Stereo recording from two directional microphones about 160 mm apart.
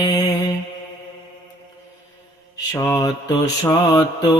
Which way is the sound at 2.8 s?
20° left (ahead or behind).